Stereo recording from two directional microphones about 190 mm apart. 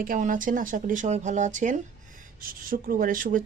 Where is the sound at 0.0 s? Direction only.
45° right (ahead or behind).